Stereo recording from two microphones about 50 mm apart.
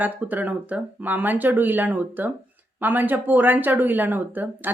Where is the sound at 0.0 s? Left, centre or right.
Right.